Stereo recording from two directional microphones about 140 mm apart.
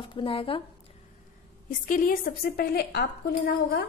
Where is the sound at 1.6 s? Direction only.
75° left (ahead or behind); by 2.8 s 90° left.